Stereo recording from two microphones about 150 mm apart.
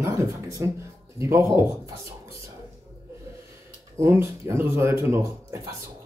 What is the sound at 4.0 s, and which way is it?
Speech, 20° right (ahead or behind).